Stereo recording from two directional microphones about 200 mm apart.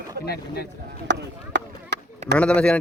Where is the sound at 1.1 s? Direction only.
60° right (ahead or behind).